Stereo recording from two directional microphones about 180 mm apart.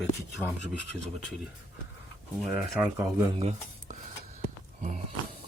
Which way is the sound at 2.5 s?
10° right (ahead or behind).